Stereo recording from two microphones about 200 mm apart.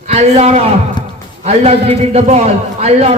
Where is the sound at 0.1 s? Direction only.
35° right (ahead or behind).